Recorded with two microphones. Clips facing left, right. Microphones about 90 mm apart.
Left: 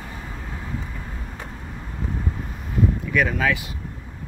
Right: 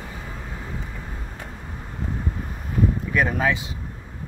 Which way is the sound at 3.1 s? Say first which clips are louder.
Even; 35° right (ahead or behind).